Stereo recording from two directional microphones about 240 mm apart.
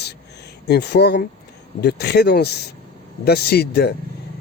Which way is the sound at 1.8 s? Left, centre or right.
Left.